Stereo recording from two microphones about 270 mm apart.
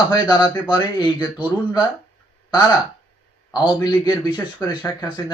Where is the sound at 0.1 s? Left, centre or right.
Centre.